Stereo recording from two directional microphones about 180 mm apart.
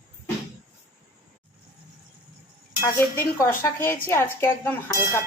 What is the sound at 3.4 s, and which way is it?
Speech, 15° left (ahead or behind).